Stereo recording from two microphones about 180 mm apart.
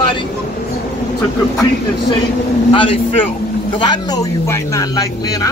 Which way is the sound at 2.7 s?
30° left (ahead or behind).